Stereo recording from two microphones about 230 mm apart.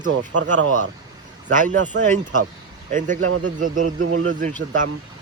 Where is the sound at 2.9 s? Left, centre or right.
Right.